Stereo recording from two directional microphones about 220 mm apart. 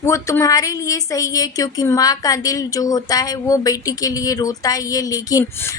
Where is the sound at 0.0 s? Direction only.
10° left (ahead or behind).